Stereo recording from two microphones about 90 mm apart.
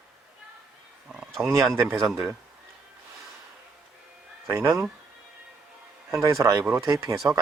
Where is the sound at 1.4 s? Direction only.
30° right (ahead or behind).